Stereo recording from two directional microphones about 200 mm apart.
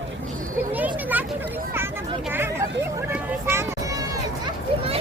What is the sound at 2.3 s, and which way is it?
Music, 10° right (ahead or behind).